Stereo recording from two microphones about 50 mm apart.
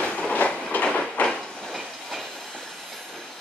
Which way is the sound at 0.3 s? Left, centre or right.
Left.